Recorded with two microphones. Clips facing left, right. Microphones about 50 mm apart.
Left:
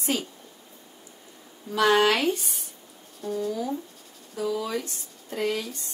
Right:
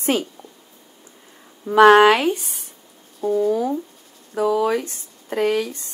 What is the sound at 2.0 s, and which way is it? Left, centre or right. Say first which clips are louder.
Speech: right 7 dB; centre.